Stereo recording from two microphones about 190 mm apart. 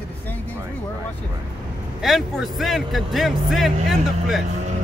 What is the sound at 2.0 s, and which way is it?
Speech, centre (ahead or behind).